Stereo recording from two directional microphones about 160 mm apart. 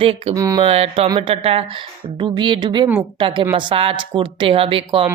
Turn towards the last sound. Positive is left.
turn(degrees=-35)  # may be behind; listen again after turning